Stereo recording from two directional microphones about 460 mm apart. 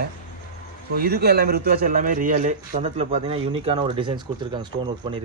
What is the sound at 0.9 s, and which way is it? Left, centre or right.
Speech, centre.